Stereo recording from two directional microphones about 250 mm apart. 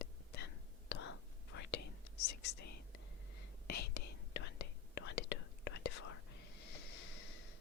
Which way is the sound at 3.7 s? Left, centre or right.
Left.